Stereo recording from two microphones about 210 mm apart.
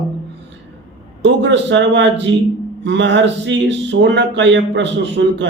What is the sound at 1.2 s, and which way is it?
A man's voice, 60° right (ahead or behind).